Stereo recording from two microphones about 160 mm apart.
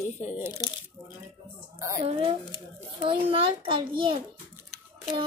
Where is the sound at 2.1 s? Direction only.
35° right (ahead or behind).